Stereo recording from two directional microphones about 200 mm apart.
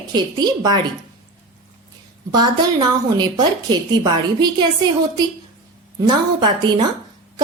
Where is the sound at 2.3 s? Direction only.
20° right (ahead or behind).